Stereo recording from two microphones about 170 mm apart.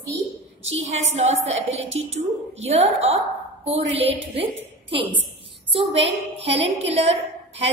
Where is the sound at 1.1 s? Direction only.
40° right (ahead or behind).